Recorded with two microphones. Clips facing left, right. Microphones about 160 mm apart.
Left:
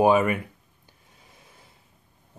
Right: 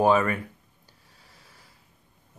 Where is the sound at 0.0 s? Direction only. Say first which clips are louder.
Left 2 dB; 15° left (ahead or behind).